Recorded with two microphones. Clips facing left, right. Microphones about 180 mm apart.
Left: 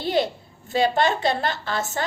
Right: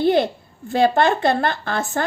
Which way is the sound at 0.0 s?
55° right (ahead or behind).